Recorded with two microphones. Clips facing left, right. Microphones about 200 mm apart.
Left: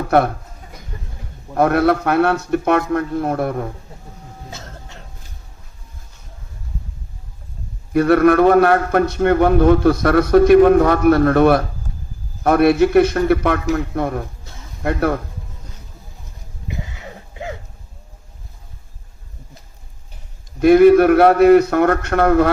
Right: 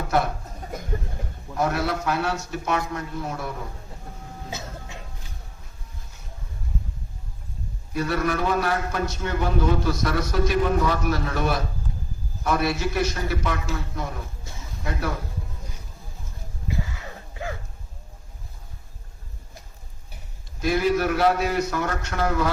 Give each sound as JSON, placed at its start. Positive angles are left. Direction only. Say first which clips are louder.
{"t": 0.1, "sound": "a man's voice", "louder": "left 8 dB", "side_deg": 60}
{"t": 1.5, "sound": "a man's voice", "louder": "left 10 dB", "side_deg": 60}
{"t": 4.5, "sound": "throat clearing", "louder": "right 1 dB", "side_deg": -10}
{"t": 7.9, "sound": "a man's voice", "louder": "left 13 dB", "side_deg": 60}
{"t": 16.6, "sound": "a sound", "louder": "even", "side_deg": 20}
{"t": 20.6, "sound": "a man's voice", "louder": "left 13 dB", "side_deg": 60}